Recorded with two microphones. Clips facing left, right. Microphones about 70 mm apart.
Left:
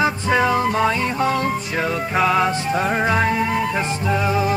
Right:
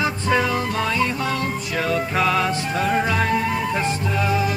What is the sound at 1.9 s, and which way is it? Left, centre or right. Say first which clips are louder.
Music: left 2 dB; centre.